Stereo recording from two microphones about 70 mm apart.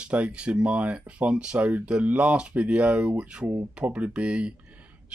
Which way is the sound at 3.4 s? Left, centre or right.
Right.